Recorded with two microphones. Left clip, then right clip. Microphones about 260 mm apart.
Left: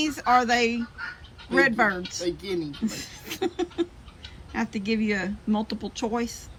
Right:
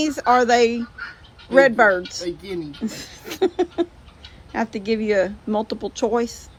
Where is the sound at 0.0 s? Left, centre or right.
Right.